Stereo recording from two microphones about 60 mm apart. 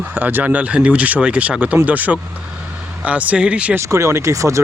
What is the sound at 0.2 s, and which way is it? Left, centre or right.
Speech, right.